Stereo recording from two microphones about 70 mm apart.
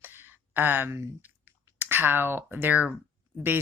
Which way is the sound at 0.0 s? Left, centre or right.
Right.